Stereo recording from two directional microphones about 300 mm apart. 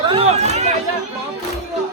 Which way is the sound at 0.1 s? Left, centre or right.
Centre.